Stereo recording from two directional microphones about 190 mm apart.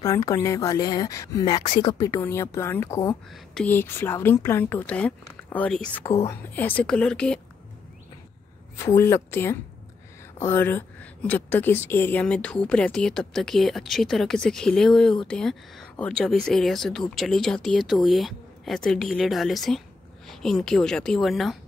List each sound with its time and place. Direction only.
0.0 s a woman's voice: 20° left (ahead or behind)
8.7 s a woman's voice: 15° left (ahead or behind)